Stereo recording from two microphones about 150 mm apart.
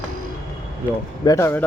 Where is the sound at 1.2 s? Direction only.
20° left (ahead or behind).